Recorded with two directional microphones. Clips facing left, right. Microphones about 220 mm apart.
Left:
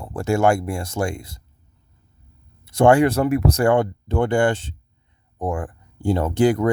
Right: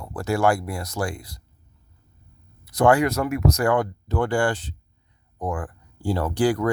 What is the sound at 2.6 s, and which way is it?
Speech, 25° left (ahead or behind).